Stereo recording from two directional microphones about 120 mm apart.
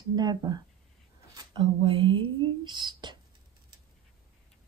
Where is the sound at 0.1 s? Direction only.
35° right (ahead or behind).